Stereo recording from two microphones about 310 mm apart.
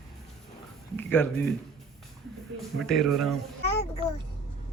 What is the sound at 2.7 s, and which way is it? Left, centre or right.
Speech, centre.